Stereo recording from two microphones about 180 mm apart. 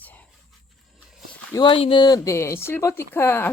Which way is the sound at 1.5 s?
25° left (ahead or behind).